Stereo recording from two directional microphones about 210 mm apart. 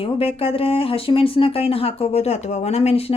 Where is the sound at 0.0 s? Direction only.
25° left (ahead or behind).